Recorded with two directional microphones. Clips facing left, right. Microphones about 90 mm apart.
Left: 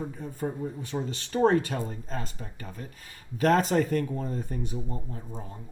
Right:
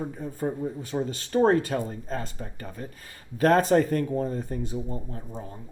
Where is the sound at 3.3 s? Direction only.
40° right (ahead or behind).